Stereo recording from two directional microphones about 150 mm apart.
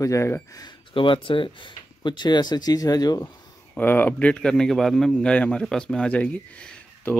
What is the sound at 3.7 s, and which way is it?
A man's voice, 10° left (ahead or behind).